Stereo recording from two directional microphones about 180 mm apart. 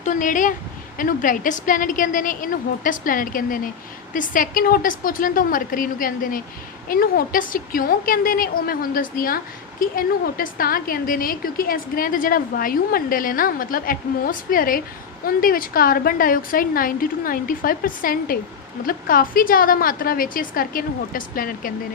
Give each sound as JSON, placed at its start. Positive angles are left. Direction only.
{"t": 0.0, "sound": "a woman's voice", "side_deg": 45}